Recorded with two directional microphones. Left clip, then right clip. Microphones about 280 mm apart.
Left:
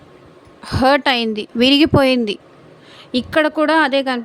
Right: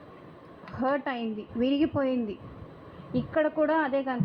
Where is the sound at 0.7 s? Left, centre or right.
Left.